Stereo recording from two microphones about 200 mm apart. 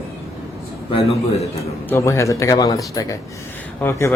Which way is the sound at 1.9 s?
15° left (ahead or behind).